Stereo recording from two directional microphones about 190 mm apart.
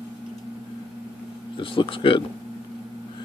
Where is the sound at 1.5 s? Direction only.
25° left (ahead or behind).